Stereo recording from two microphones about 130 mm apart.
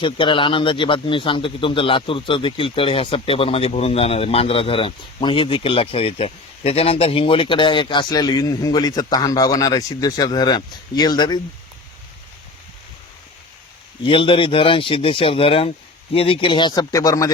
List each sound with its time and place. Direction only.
0.0 s speech: 40° left (ahead or behind)
14.0 s speech: 40° left (ahead or behind)